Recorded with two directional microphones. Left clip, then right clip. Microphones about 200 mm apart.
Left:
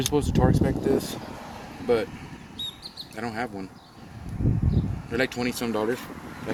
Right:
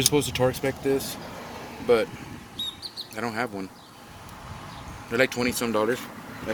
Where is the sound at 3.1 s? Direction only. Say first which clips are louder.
Right 2 dB; 20° left (ahead or behind).